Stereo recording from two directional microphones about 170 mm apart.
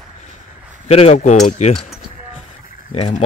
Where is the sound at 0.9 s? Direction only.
35° left (ahead or behind).